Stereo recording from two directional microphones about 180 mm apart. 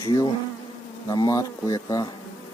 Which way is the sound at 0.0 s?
25° left (ahead or behind).